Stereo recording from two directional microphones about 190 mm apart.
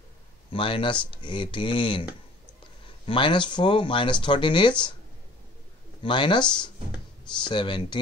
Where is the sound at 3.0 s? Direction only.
25° left (ahead or behind).